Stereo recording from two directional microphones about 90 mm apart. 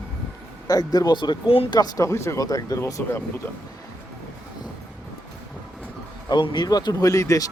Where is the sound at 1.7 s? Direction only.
45° left (ahead or behind).